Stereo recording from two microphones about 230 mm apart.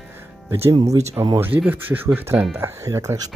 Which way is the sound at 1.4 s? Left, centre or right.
Centre.